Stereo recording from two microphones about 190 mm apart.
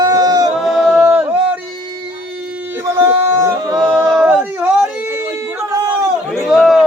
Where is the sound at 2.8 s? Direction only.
10° right (ahead or behind).